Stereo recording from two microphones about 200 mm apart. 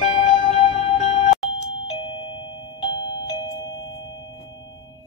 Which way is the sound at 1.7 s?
25° left (ahead or behind).